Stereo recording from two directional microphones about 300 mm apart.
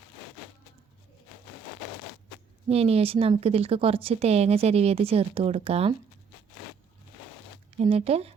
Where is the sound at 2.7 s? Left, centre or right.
Centre.